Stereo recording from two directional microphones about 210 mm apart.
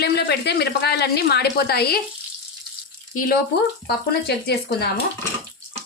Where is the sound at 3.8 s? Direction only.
50° left (ahead or behind).